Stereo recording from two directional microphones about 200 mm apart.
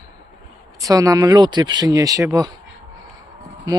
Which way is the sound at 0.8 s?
15° right (ahead or behind).